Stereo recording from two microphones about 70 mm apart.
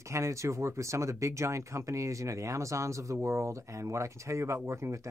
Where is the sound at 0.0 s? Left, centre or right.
Right.